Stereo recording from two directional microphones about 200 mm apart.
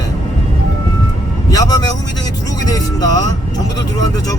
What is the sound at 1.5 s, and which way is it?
Speech, 20° left (ahead or behind).